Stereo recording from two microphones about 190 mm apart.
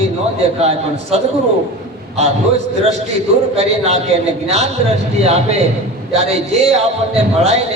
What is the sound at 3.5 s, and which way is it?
A man's voice, 35° right (ahead or behind).